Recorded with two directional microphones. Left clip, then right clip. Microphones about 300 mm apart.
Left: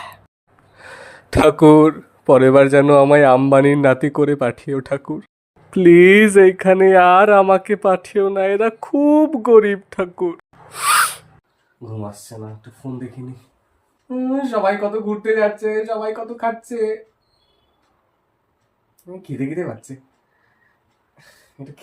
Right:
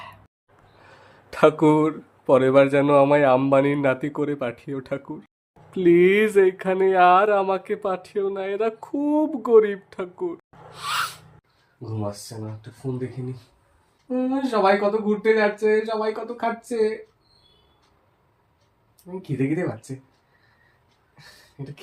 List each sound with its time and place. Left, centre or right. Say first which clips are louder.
0.8 s speech: left 13 dB; left
14.3 s speech: left 2 dB; centre
21.6 s speech: left 1 dB; centre